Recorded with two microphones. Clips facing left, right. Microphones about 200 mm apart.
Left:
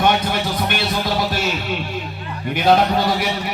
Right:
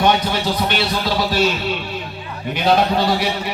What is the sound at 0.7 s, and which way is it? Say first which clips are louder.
Speech: right 1 dB; 50° left (ahead or behind).